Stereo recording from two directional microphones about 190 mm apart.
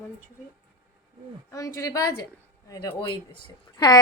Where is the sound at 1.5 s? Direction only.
20° left (ahead or behind).